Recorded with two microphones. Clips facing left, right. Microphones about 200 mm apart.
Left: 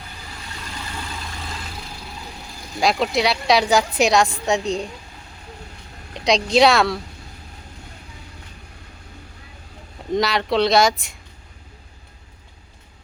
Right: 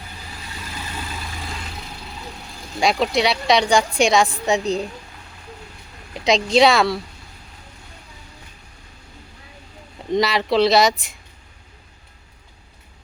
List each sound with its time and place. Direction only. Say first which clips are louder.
2.8 s a woman's voice: right 1 dB; centre (ahead or behind)
6.1 s a woman's voice: right 1 dB; centre (ahead or behind)
10.1 s a woman's voice: right 1 dB; centre (ahead or behind)